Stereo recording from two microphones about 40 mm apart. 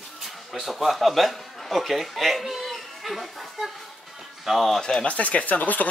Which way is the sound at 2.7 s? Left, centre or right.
Centre.